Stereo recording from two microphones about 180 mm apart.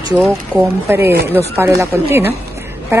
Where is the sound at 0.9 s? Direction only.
10° right (ahead or behind).